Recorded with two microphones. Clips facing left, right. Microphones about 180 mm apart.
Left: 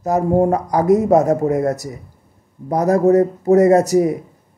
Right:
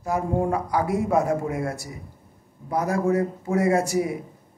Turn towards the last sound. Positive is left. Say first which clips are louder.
# left 9 dB
turn(degrees=40)  # may be behind; listen again after turning